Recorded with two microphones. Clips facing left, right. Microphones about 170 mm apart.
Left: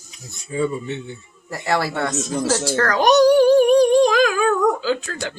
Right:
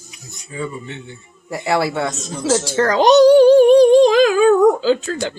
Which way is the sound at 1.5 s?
15° right (ahead or behind).